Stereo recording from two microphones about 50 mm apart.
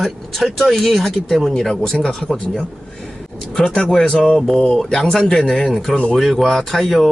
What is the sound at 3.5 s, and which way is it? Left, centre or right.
Speech, centre.